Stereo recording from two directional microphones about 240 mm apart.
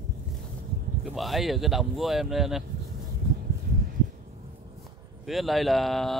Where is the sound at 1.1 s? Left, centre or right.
Centre.